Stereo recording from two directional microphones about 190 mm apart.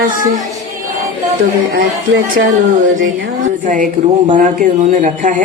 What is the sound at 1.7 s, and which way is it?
Speech, 70° right (ahead or behind).